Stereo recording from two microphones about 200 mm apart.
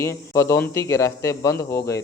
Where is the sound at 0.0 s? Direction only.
15° left (ahead or behind).